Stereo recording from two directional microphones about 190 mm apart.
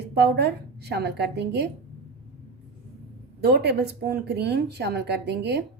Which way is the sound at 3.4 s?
60° right (ahead or behind).